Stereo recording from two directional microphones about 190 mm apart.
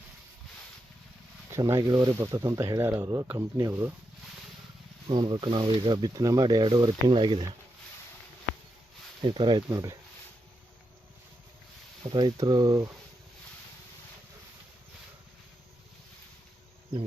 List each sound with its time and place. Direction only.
1.5 s speech: 15° right (ahead or behind)
5.0 s speech: 25° right (ahead or behind)
9.2 s speech: 25° right (ahead or behind)
12.0 s speech: 20° right (ahead or behind)